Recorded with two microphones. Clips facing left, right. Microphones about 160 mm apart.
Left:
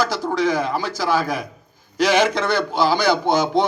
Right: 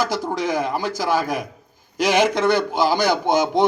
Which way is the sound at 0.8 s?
50° right (ahead or behind).